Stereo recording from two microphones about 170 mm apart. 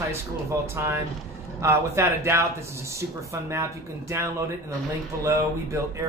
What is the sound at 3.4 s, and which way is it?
Speech, 15° right (ahead or behind).